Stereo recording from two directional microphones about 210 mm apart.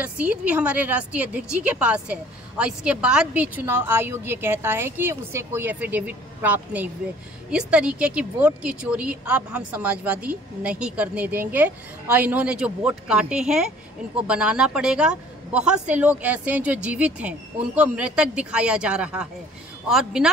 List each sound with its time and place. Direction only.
0.0 s a woman's voice: 5° right (ahead or behind)